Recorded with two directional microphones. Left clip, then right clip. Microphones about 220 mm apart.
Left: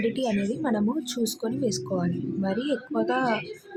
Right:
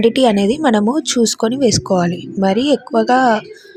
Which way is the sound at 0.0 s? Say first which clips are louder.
Right 14 dB; 35° right (ahead or behind).